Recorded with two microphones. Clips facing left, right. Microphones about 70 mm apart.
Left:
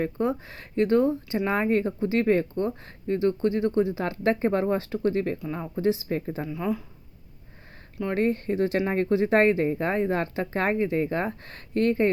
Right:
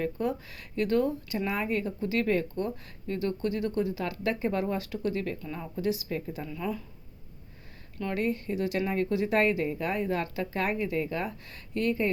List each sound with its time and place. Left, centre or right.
0.0 s speech: left
6.4 s speech: left
8.1 s speech: left